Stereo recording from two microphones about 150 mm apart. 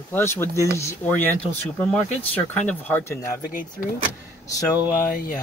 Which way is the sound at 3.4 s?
65° left (ahead or behind).